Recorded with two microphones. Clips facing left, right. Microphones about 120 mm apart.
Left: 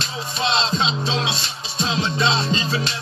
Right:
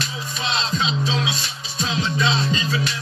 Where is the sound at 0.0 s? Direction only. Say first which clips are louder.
Left 3 dB; 30° left (ahead or behind).